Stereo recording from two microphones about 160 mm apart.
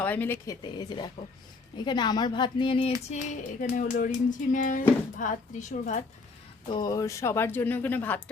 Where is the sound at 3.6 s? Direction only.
55° left (ahead or behind).